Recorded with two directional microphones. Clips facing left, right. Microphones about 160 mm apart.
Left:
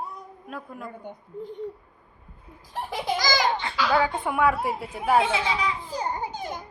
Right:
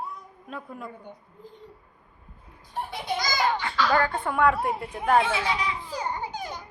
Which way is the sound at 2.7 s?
90° left.